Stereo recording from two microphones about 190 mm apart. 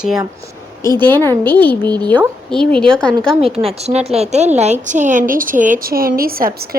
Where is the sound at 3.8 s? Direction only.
35° right (ahead or behind).